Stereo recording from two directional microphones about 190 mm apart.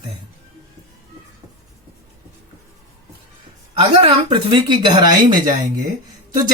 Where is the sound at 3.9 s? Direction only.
30° right (ahead or behind).